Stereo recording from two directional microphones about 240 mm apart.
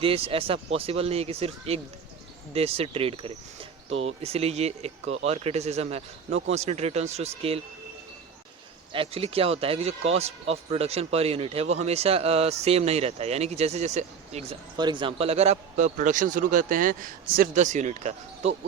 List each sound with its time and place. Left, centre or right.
0.0 s speech: right
8.9 s a man's voice: right